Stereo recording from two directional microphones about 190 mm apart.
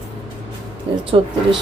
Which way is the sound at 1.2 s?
25° right (ahead or behind).